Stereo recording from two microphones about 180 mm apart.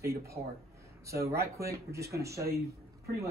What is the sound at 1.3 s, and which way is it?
Speech, 60° right (ahead or behind).